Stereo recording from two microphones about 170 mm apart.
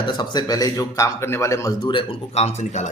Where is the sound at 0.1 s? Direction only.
25° left (ahead or behind).